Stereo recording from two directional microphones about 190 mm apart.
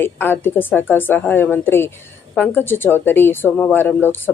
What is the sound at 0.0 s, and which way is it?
Speech, 10° left (ahead or behind).